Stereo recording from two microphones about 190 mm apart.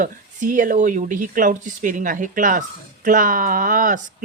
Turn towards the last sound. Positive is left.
turn(degrees=-45)  # may be behind; listen again after turning